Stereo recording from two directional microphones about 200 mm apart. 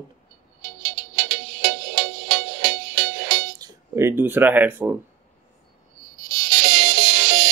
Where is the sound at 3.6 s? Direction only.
15° right (ahead or behind).